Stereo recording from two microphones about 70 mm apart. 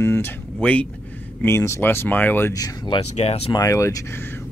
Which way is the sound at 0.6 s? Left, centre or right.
Centre.